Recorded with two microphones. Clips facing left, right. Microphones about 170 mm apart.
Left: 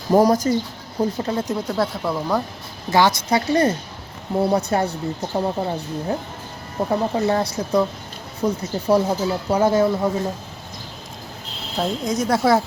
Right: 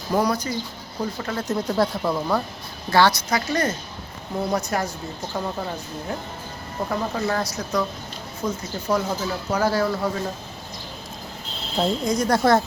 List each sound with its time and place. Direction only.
0.1 s speech: 45° left (ahead or behind)
1.2 s speech: 25° left (ahead or behind)
1.6 s speech: centre (ahead or behind)
2.9 s a woman's voice: 20° left (ahead or behind)
3.2 s speech: 30° left (ahead or behind)
11.8 s speech: centre (ahead or behind)